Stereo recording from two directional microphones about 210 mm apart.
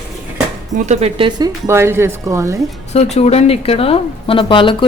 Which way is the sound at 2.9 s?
30° left (ahead or behind).